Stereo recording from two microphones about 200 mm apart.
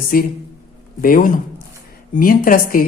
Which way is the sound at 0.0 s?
45° left (ahead or behind).